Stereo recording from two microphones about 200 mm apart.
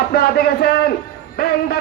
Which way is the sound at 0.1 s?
50° left (ahead or behind).